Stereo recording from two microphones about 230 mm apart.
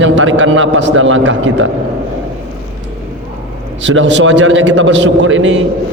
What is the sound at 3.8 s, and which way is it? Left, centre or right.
A man's voice, right.